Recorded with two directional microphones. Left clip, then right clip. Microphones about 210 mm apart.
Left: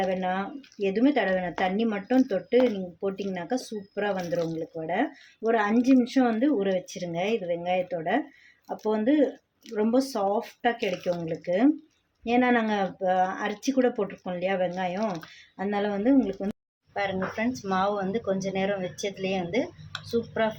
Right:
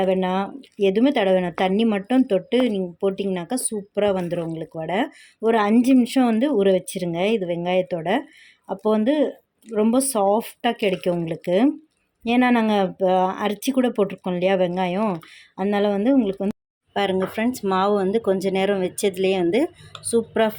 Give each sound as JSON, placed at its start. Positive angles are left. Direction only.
{"t": 0.0, "sound": "speech", "side_deg": -45}
{"t": 5.5, "sound": "speech", "side_deg": -45}